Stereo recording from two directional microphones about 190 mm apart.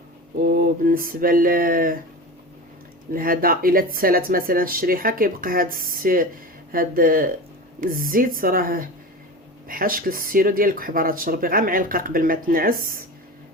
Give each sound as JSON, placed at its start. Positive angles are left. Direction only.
{"t": 0.3, "sound": "speech", "side_deg": -50}
{"t": 3.1, "sound": "speech", "side_deg": -50}